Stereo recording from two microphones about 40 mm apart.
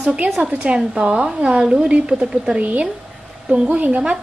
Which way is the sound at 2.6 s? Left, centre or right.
Right.